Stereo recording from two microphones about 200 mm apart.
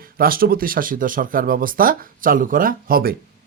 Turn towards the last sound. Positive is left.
turn(degrees=-50)  # may be behind; listen again after turning